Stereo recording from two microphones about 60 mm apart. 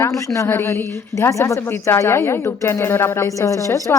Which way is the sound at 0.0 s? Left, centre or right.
Left.